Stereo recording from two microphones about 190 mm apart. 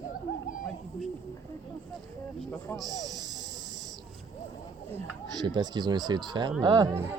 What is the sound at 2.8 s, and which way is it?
Speech, 20° right (ahead or behind).